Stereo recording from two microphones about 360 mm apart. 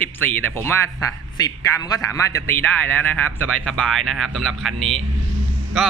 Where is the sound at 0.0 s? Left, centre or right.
Centre.